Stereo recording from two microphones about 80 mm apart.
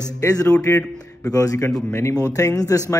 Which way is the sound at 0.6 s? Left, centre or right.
Left.